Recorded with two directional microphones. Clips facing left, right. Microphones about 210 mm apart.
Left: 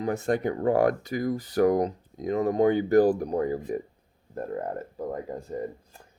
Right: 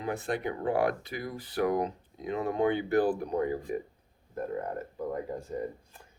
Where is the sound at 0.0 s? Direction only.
45° left (ahead or behind).